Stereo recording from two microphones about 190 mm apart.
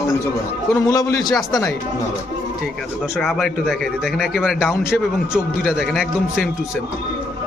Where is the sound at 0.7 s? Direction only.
15° left (ahead or behind).